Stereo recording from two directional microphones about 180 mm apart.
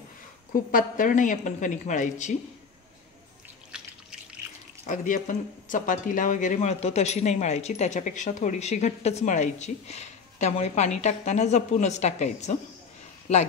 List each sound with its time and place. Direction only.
0.7 s a woman's voice: 50° left (ahead or behind)
4.8 s speech: 45° left (ahead or behind)